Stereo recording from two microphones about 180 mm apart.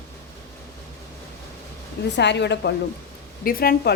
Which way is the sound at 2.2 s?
75° left (ahead or behind).